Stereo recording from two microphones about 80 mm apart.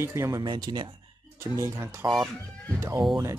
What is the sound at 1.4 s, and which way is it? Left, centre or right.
Speech, right.